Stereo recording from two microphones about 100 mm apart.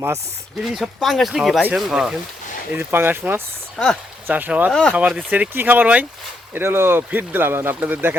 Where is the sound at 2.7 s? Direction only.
20° right (ahead or behind).